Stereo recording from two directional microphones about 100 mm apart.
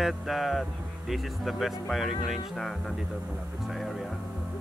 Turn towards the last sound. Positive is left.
turn(degrees=0)  # may be behind; listen again after turning